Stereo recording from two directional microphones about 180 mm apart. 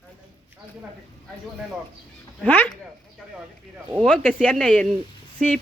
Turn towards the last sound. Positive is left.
turn(degrees=5)  # may be behind; listen again after turning